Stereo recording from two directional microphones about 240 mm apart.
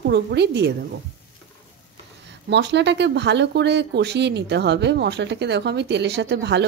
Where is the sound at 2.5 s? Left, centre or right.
Right.